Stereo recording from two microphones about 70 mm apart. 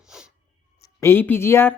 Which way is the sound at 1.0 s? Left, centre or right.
Left.